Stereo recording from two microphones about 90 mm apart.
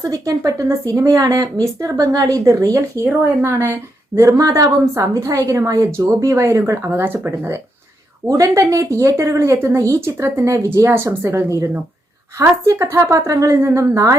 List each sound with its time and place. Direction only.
0.0 s speech: 40° right (ahead or behind)
8.3 s speech: 40° right (ahead or behind)